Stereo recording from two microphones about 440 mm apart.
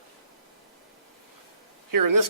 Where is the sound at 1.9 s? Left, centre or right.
Right.